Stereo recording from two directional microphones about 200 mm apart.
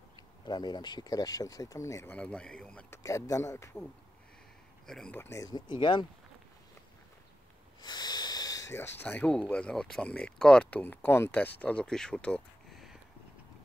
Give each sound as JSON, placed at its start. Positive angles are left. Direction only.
{"t": 0.5, "sound": "speech", "side_deg": 20}
{"t": 3.0, "sound": "speech", "side_deg": 15}
{"t": 4.8, "sound": "speech", "side_deg": 5}
{"t": 7.8, "sound": "a sound", "side_deg": 20}
{"t": 8.7, "sound": "speech", "side_deg": 10}